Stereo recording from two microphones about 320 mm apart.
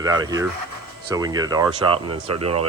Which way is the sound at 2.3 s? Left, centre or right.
Right.